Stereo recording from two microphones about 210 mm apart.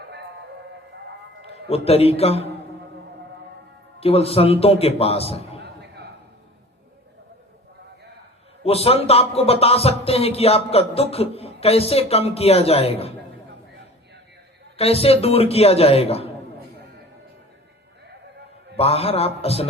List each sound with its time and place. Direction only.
1.6 s speech: 30° left (ahead or behind)
4.0 s speech: 30° left (ahead or behind)
5.6 s a sound: 50° right (ahead or behind)
8.6 s speech: 30° left (ahead or behind)
14.8 s speech: 30° left (ahead or behind)
18.8 s speech: 30° left (ahead or behind)